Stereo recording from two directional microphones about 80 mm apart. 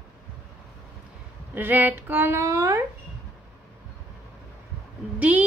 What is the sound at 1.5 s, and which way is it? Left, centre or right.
Speech, right.